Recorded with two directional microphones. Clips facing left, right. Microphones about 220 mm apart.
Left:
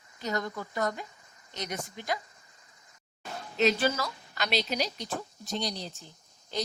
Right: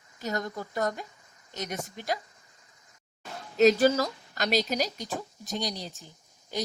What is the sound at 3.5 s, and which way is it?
Speech, 40° right (ahead or behind).